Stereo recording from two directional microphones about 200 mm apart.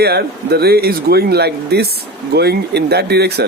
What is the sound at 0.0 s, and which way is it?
Speech, 55° right (ahead or behind).